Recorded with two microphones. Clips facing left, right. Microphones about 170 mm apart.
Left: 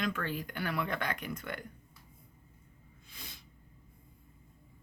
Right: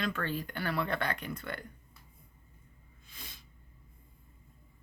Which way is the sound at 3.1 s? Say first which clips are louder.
Left 1 dB; 20° left (ahead or behind).